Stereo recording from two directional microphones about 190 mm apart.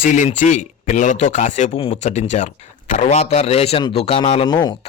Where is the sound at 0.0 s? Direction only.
40° left (ahead or behind).